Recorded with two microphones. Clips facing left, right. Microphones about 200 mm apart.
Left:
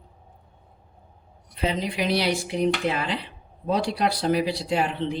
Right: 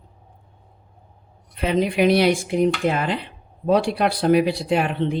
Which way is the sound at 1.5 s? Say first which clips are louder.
Right 7 dB; 55° right (ahead or behind).